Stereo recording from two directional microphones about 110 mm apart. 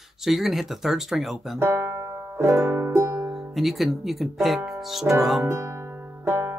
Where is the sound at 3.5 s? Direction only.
Centre (ahead or behind).